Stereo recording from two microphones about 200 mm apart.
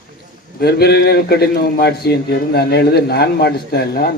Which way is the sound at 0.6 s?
50° left (ahead or behind).